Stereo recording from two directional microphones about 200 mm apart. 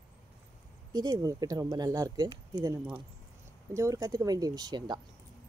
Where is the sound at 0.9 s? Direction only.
20° right (ahead or behind).